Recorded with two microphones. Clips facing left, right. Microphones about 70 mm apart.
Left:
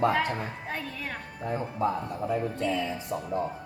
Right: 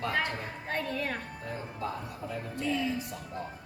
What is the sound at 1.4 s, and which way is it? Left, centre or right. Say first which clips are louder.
Speech: left 10 dB; left.